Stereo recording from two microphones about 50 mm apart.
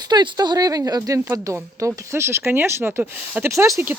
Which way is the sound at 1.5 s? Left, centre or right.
Right.